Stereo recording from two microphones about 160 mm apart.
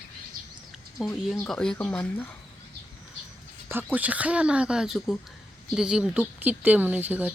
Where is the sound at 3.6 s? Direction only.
10° right (ahead or behind).